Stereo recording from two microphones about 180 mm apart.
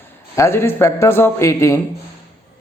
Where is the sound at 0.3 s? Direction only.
15° left (ahead or behind).